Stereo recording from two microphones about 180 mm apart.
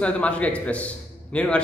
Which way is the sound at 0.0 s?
5° left (ahead or behind).